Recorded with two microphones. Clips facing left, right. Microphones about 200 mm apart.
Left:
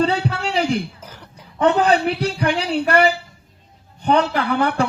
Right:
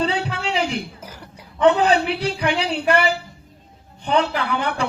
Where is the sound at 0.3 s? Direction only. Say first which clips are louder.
Left 3 dB; 40° left (ahead or behind).